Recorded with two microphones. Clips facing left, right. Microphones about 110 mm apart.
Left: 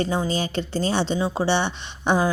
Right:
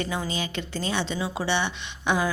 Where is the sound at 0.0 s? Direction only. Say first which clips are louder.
Left 6 dB; 35° left (ahead or behind).